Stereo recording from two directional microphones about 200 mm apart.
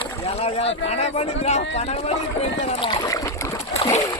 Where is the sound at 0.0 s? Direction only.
30° left (ahead or behind).